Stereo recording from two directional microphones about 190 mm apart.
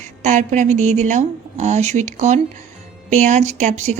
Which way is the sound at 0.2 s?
40° right (ahead or behind).